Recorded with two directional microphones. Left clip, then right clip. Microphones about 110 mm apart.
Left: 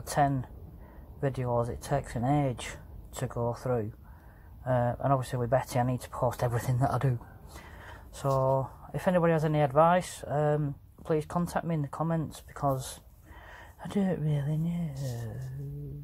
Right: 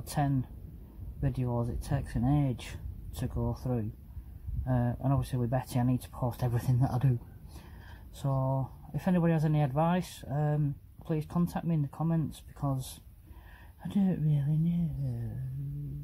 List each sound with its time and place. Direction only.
0.0 s speech: 30° left (ahead or behind)
8.3 s speech: 45° left (ahead or behind)
8.9 s speech: 30° left (ahead or behind)